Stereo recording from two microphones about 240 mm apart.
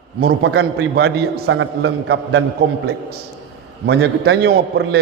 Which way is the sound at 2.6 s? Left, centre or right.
Right.